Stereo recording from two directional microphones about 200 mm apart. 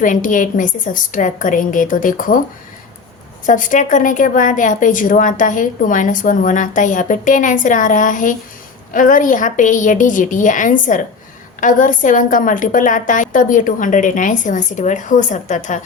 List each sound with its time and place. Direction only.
0.0 s a woman's voice: 40° left (ahead or behind)
3.4 s a woman's voice: 40° left (ahead or behind)